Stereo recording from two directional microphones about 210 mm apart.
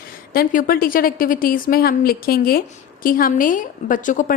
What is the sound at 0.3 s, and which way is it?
A woman's voice, 45° left (ahead or behind).